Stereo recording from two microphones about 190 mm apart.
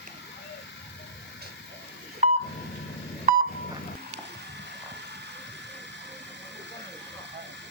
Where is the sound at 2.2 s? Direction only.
35° right (ahead or behind).